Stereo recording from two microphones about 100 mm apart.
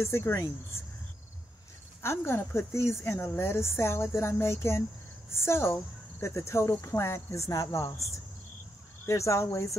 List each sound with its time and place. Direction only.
0.0 s a woman's voice: 25° left (ahead or behind)
2.0 s a woman's voice: 25° left (ahead or behind)
9.0 s a woman's voice: 30° left (ahead or behind)